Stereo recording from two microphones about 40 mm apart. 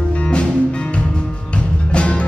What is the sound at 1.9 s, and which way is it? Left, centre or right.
Music, left.